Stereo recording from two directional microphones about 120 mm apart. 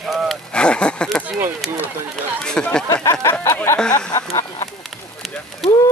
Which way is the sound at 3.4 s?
25° left (ahead or behind).